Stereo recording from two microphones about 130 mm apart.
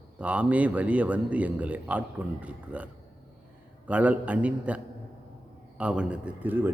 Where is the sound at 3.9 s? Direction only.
10° right (ahead or behind).